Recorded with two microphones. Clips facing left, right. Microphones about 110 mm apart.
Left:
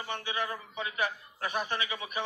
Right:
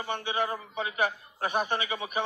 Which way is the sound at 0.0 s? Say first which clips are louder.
Right 4 dB; 20° right (ahead or behind).